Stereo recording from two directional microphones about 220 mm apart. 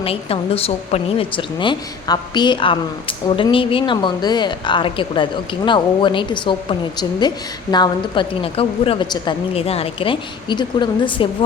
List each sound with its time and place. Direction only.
0.0 s a woman's voice: 25° left (ahead or behind)